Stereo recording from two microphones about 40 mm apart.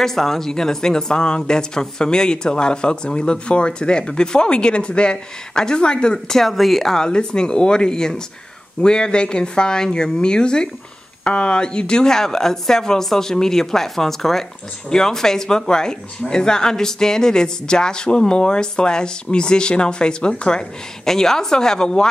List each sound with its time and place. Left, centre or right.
0.0 s speech: centre
7.1 s speech: left